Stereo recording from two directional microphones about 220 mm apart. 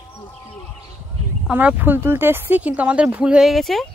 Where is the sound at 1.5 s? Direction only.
5° right (ahead or behind).